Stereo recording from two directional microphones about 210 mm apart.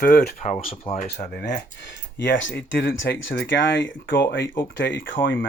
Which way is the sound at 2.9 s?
65° left (ahead or behind).